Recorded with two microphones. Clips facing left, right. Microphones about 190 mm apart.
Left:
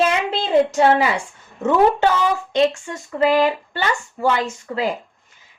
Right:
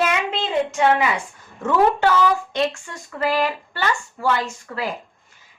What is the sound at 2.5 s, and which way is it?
A woman's voice, 20° left (ahead or behind).